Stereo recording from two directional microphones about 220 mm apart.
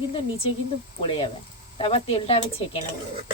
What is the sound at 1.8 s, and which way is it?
Speech, 25° left (ahead or behind).